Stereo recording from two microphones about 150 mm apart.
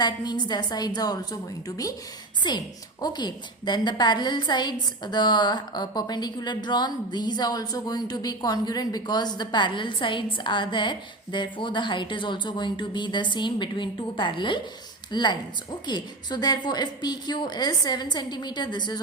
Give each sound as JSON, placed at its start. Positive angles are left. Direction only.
{"t": 0.0, "sound": "a woman's voice", "side_deg": 30}